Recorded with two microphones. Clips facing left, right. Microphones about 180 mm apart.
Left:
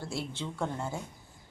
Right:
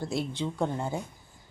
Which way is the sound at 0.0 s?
15° right (ahead or behind).